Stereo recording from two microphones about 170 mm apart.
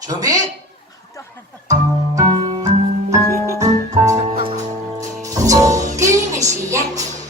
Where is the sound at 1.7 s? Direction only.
20° right (ahead or behind).